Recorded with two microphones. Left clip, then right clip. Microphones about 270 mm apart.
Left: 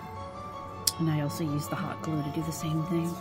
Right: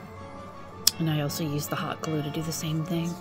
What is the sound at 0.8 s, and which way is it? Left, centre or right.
Speech, right.